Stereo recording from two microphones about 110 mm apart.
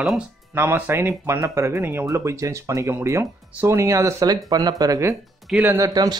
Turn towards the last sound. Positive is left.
turn(degrees=-35)  # may be behind; listen again after turning